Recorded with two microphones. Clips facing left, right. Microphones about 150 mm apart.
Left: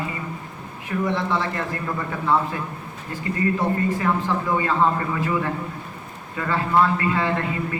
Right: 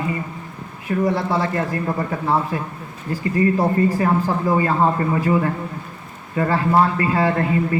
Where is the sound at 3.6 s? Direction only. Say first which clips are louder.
Right 5 dB; 40° right (ahead or behind).